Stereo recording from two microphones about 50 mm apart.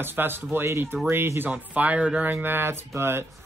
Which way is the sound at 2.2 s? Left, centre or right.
Right.